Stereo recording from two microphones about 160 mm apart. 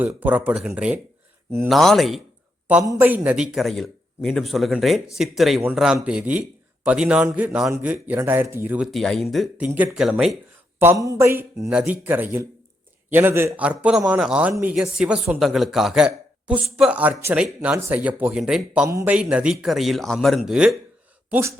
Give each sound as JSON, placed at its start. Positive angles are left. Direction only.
{"t": 0.0, "sound": "a man's voice", "side_deg": -10}
{"t": 3.0, "sound": "a man's voice", "side_deg": -10}
{"t": 8.9, "sound": "speech", "side_deg": 5}
{"t": 10.8, "sound": "a man's voice", "side_deg": -15}
{"t": 18.9, "sound": "a man's voice", "side_deg": -20}
{"t": 19.1, "sound": "speech", "side_deg": -5}